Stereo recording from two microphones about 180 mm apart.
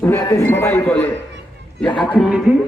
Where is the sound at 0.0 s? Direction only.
15° left (ahead or behind); by 2.4 s centre (ahead or behind).